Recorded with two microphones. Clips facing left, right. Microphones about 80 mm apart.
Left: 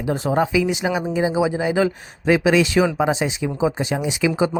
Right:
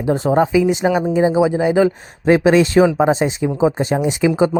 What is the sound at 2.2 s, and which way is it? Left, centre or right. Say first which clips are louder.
Speech: right 4 dB; right.